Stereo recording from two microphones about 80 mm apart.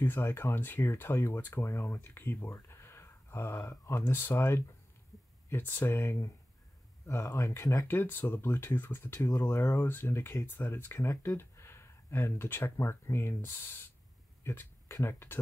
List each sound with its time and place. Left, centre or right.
0.0 s speech: left
7.9 s speech: left